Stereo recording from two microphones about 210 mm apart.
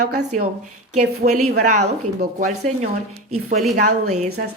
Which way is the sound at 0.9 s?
35° right (ahead or behind).